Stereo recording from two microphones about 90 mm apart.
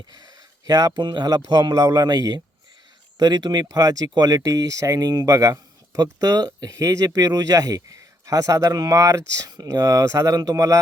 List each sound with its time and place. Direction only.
0.7 s speech: 45° right (ahead or behind)
9.5 s speech: 50° right (ahead or behind)